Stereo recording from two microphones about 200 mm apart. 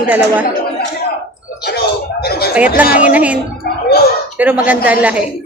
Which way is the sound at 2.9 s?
5° right (ahead or behind).